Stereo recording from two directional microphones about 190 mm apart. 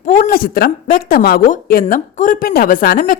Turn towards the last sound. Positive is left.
turn(degrees=45)  # may be behind; listen again after turning